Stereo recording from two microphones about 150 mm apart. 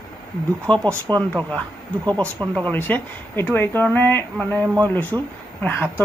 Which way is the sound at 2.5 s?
10° left (ahead or behind).